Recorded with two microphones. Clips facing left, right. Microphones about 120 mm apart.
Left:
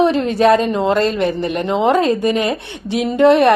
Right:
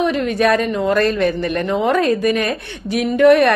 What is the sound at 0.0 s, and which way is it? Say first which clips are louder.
Speech: left 3 dB; 30° left (ahead or behind).